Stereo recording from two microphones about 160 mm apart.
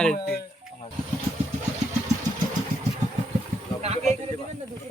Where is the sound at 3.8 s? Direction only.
40° right (ahead or behind).